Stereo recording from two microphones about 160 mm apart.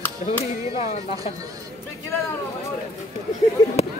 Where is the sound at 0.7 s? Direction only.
40° left (ahead or behind).